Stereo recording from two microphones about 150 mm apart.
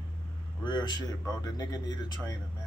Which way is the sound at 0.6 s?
30° left (ahead or behind).